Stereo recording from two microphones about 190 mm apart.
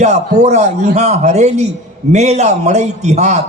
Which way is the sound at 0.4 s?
35° right (ahead or behind).